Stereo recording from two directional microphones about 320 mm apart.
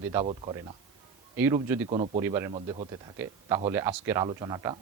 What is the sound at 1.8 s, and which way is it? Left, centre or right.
Speech, centre.